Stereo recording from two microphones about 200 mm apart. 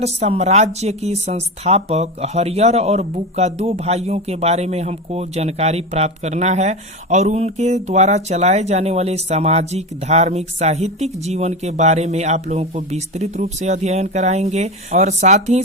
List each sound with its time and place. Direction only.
0.0 s speech: 30° right (ahead or behind)